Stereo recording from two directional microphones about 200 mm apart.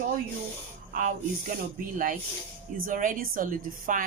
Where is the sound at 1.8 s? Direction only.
45° right (ahead or behind).